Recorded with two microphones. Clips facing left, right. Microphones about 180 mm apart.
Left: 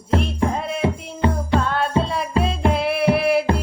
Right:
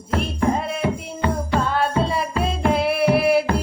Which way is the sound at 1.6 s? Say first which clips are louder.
Even; centre (ahead or behind).